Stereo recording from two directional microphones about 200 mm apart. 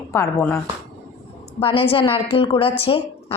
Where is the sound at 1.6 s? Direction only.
30° left (ahead or behind).